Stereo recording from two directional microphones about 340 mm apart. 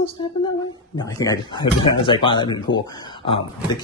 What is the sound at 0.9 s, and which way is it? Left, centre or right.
A man's voice, centre.